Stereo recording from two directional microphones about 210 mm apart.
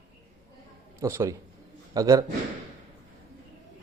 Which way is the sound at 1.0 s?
15° right (ahead or behind).